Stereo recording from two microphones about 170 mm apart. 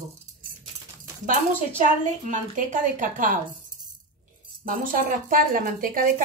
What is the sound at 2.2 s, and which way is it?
A woman's voice, 45° right (ahead or behind).